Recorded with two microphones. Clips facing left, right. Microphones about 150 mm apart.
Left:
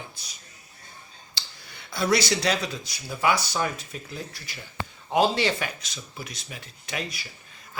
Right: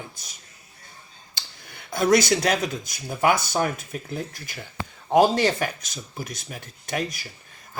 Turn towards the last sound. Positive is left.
turn(degrees=-45)  # may be behind; listen again after turning